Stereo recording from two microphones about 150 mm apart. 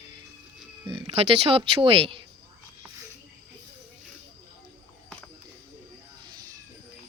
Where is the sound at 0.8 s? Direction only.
35° right (ahead or behind).